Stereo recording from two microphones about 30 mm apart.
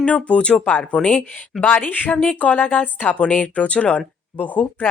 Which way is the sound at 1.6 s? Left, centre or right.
Left.